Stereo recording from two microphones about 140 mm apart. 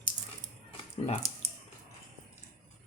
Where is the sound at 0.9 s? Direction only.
50° left (ahead or behind).